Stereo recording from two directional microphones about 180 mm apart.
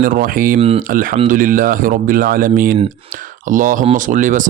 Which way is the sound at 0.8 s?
50° right (ahead or behind).